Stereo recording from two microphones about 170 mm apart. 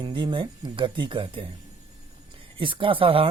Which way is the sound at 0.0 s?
30° right (ahead or behind).